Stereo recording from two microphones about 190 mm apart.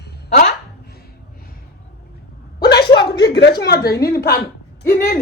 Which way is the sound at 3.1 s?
60° left (ahead or behind).